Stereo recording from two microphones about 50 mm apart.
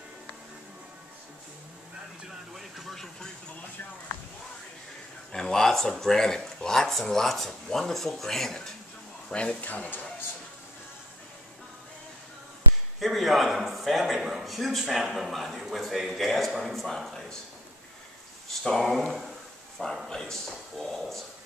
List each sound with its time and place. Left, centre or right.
2.5 s a man's voice: centre
5.3 s speech: centre
9.3 s speech: left
9.7 s speech: left
13.0 s a man's voice: centre
18.6 s a man's voice: centre
20.1 s speech: centre